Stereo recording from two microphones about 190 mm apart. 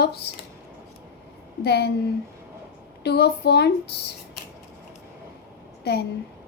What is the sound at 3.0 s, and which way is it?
Speech, 60° left (ahead or behind).